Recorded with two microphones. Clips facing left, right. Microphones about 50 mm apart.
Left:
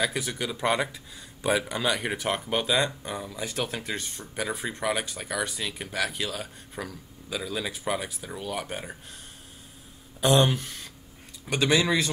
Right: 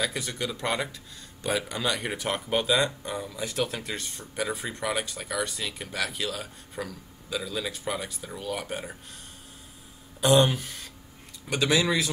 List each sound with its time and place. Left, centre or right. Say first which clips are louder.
0.0 s speech: left 2 dB; centre
10.2 s speech: right 1 dB; centre